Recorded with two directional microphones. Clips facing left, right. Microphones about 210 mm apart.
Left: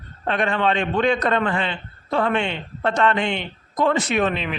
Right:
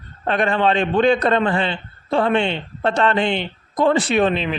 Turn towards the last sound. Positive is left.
turn(degrees=-30)  # may be behind; listen again after turning